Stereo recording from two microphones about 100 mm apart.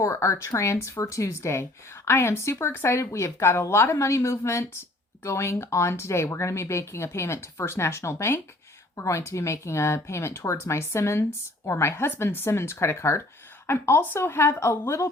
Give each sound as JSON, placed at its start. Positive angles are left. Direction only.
{"t": 0.0, "sound": "speech", "side_deg": 30}